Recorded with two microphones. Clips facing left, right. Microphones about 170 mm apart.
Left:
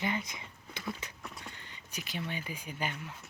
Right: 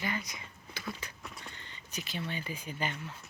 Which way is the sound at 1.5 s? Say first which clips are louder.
Even; 10° left (ahead or behind).